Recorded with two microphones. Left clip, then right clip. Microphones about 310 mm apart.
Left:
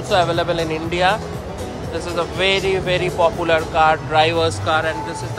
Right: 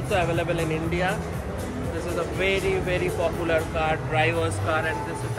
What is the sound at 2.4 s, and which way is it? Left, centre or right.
Speech, centre.